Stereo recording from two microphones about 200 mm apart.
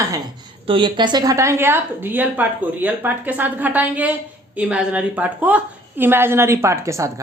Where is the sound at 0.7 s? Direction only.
25° right (ahead or behind).